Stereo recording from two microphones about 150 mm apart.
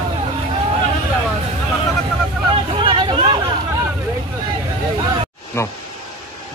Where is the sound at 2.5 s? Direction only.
35° right (ahead or behind).